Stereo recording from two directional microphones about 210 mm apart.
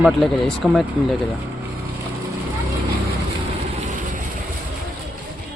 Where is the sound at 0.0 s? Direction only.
Centre (ahead or behind).